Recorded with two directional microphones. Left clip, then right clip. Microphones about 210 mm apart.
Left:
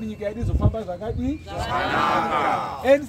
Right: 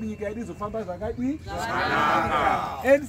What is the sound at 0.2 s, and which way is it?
Speech, 10° left (ahead or behind).